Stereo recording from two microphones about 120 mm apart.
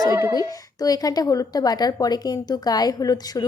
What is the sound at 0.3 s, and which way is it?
A woman's voice, 30° left (ahead or behind).